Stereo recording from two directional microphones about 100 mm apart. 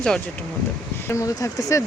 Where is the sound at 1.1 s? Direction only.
30° left (ahead or behind).